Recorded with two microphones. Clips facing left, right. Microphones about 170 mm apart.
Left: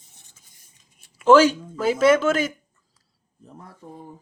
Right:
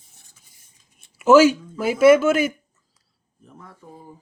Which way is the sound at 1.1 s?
10° right (ahead or behind).